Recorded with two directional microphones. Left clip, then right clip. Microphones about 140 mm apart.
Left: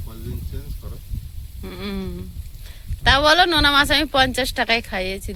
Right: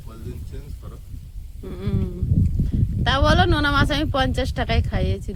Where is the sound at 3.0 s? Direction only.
15° right (ahead or behind).